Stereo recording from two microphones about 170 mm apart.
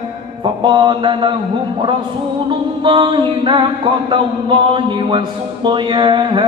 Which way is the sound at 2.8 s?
30° right (ahead or behind).